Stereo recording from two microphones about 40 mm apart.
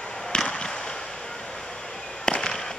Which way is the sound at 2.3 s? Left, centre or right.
Left.